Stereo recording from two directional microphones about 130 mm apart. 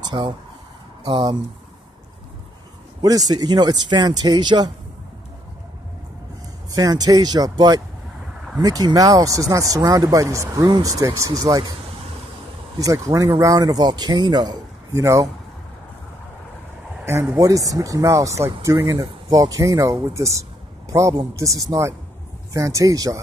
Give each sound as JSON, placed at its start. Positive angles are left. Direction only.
{"t": 0.0, "sound": "a sound", "side_deg": -35}
{"t": 1.0, "sound": "speech", "side_deg": -35}
{"t": 3.0, "sound": "speech", "side_deg": -30}
{"t": 6.7, "sound": "speech", "side_deg": -30}
{"t": 12.8, "sound": "speech", "side_deg": -25}
{"t": 14.9, "sound": "speech", "side_deg": -25}
{"t": 17.0, "sound": "speech", "side_deg": -20}